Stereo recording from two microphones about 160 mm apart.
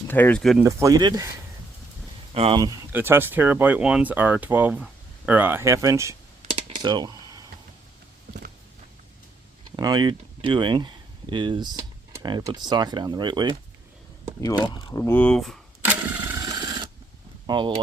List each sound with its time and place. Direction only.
0.1 s speech: 10° left (ahead or behind)
0.6 s speech: 20° right (ahead or behind)
2.3 s speech: 40° right (ahead or behind)
2.6 s speech: 25° right (ahead or behind)
6.5 s computer keyboard: 30° right (ahead or behind)
9.7 s speech: 25° right (ahead or behind)
14.4 s speech: 25° left (ahead or behind)
15.1 s speech: 5° left (ahead or behind)
15.8 s a sound: 10° right (ahead or behind)
16.4 s sewing machine: 25° right (ahead or behind)
17.4 s a sound: 30° right (ahead or behind)